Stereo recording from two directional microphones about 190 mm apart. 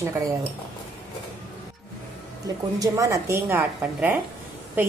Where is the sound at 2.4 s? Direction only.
20° right (ahead or behind).